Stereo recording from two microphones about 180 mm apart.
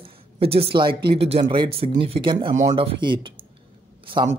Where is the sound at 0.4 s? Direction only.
30° right (ahead or behind).